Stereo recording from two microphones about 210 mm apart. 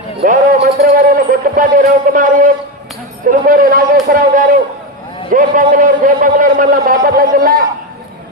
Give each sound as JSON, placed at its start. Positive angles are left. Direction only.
{"t": 0.2, "sound": "a man's voice", "side_deg": -45}